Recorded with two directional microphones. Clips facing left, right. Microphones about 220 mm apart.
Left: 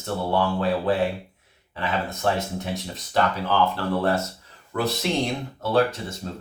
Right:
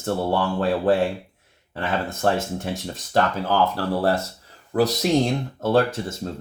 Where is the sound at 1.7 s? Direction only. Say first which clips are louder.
Right 2 dB; 50° right (ahead or behind).